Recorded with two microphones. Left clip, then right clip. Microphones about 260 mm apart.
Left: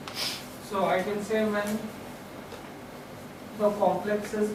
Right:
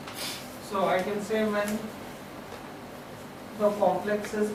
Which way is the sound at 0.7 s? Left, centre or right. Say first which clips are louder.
Even; centre.